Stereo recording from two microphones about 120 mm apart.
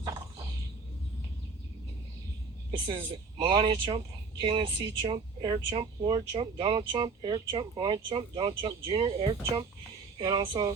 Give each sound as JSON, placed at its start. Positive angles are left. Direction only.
{"t": 0.0, "sound": "a sound", "side_deg": -30}
{"t": 2.7, "sound": "speech", "side_deg": -35}
{"t": 3.5, "sound": "speech", "side_deg": -45}
{"t": 10.2, "sound": "speech", "side_deg": -30}